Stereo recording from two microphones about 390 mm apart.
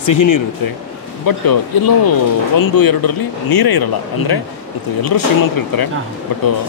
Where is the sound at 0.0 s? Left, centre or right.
Left.